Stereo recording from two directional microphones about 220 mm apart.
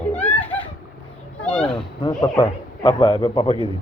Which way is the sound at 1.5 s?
20° left (ahead or behind).